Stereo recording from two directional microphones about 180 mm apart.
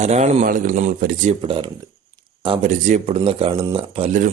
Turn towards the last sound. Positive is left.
turn(degrees=-30)  # may be behind; listen again after turning